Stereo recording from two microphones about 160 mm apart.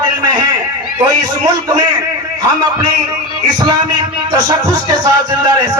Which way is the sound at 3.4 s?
25° right (ahead or behind).